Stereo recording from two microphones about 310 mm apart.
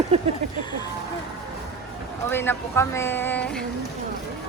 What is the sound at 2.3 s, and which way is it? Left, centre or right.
Speech, centre.